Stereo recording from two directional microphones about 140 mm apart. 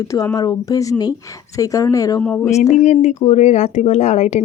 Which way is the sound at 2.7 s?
55° left (ahead or behind).